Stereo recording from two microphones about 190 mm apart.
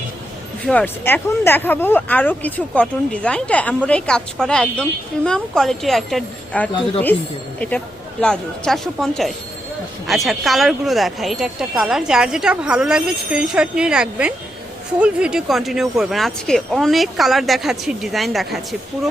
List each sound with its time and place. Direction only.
0.6 s speech: 5° left (ahead or behind)
8.2 s speech: 5° left (ahead or behind)